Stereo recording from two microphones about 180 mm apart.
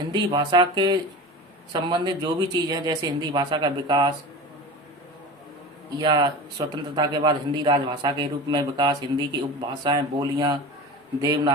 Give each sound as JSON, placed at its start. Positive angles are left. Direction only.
{"t": 0.1, "sound": "a man's voice", "side_deg": -25}
{"t": 6.0, "sound": "a man's voice", "side_deg": -25}